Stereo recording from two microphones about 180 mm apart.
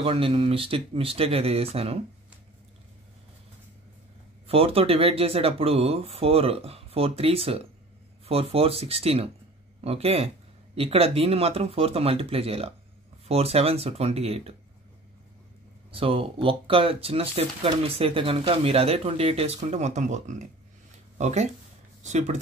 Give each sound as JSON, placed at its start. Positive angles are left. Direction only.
{"t": 0.0, "sound": "speech", "side_deg": -30}
{"t": 4.5, "sound": "speech", "side_deg": -30}
{"t": 15.9, "sound": "speech", "side_deg": -30}